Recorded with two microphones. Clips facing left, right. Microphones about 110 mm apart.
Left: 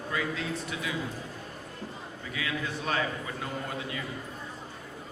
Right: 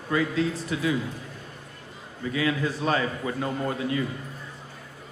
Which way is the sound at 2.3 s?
35° right (ahead or behind).